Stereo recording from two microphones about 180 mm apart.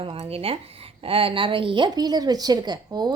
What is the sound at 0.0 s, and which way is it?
A woman's voice, 30° right (ahead or behind).